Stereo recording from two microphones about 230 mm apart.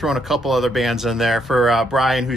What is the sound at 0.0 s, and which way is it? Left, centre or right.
Speech, centre.